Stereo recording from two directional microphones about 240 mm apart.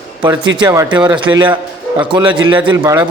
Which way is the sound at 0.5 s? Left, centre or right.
Centre.